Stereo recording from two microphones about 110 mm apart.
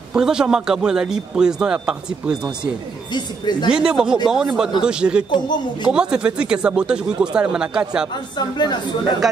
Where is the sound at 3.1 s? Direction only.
40° left (ahead or behind).